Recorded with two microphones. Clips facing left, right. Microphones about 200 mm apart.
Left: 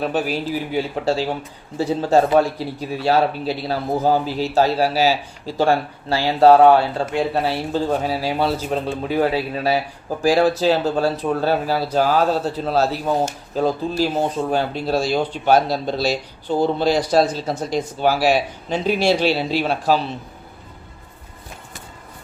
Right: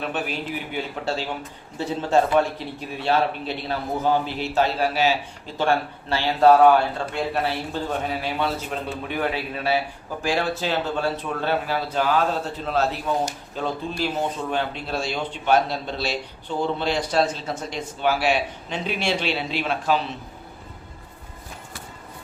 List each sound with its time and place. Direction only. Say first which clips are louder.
0.0 s a man's voice: left 6 dB; 35° left (ahead or behind)